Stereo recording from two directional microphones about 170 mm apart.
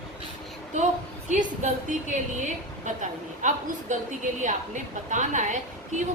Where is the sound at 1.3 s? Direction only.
45° right (ahead or behind).